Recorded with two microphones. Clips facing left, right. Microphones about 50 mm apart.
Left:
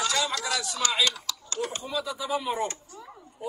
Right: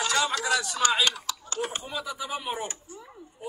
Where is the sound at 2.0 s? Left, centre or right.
Centre.